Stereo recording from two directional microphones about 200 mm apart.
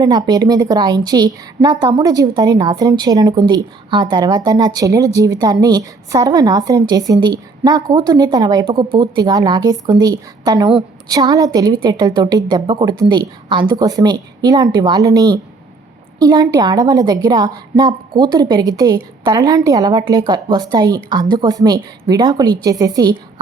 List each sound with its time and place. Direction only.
0.0 s a woman's voice: 20° right (ahead or behind)